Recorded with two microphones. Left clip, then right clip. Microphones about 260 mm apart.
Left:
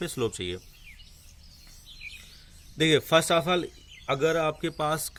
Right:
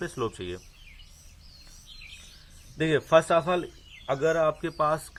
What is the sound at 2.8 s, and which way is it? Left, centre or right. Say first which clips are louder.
Speech: even; left.